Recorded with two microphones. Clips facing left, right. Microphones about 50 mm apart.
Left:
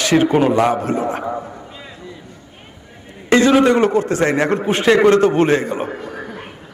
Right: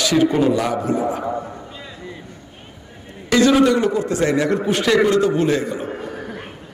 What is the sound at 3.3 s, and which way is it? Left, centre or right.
A man's voice, left.